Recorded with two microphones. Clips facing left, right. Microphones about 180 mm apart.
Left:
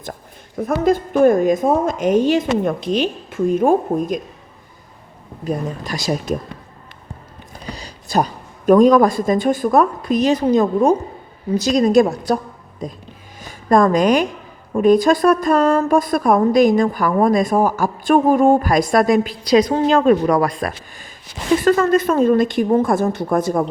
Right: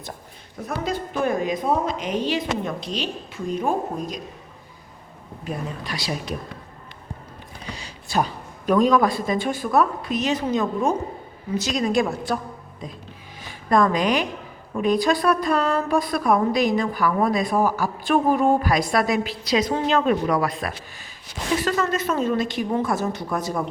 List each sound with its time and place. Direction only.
0.6 s a woman's voice: 50° left (ahead or behind)
5.5 s a woman's voice: 45° left (ahead or behind)
7.5 s a man's voice: 40° left (ahead or behind)